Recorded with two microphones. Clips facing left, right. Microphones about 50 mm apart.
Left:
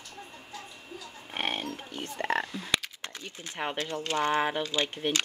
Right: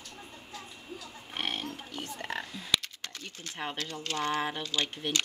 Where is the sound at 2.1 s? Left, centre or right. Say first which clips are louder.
Left 10 dB; left.